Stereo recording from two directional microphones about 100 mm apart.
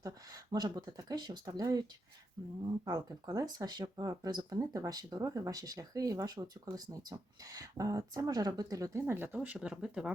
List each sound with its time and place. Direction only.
0.5 s speech: 45° right (ahead or behind)
2.8 s speech: 35° right (ahead or behind); by 10.1 s 5° right (ahead or behind)